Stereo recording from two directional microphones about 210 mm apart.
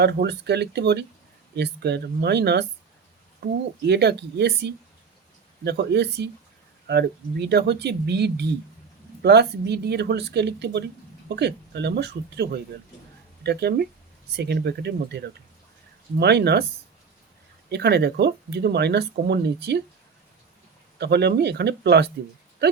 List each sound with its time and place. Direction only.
0.0 s speech: 55° right (ahead or behind)
17.7 s speech: 50° right (ahead or behind)
21.0 s speech: 50° right (ahead or behind)
22.6 s livestock: 50° right (ahead or behind)